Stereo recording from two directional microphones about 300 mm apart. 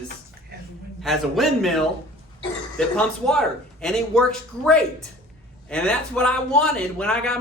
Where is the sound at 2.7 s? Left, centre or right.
Centre.